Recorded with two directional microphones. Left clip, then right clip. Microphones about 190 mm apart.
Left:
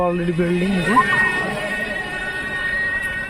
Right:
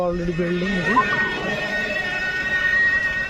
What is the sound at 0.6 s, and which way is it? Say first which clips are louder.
Speech: left 2 dB; 35° left (ahead or behind).